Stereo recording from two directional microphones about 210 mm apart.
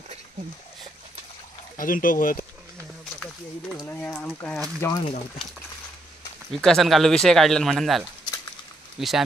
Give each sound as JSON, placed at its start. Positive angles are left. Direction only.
{"t": 1.8, "sound": "speech", "side_deg": 40}
{"t": 3.8, "sound": "a sound", "side_deg": 10}
{"t": 4.8, "sound": "speech", "side_deg": 15}
{"t": 6.6, "sound": "speech", "side_deg": 0}